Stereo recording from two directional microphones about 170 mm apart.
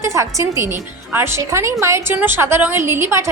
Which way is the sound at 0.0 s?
15° right (ahead or behind).